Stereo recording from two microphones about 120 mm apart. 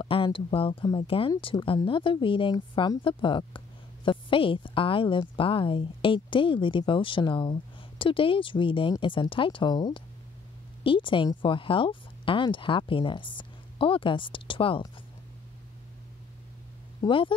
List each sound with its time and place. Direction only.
0.0 s speech: 45° left (ahead or behind)
17.0 s speech: 30° left (ahead or behind)